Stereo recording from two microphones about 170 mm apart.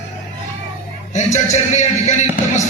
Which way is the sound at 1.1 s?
45° left (ahead or behind).